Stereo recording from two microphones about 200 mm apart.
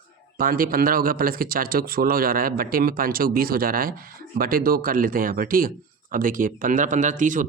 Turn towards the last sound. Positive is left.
turn(degrees=-40)  # may be behind; listen again after turning